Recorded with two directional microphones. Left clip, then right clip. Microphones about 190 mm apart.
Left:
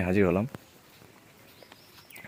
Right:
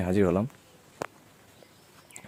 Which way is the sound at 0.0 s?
Centre (ahead or behind).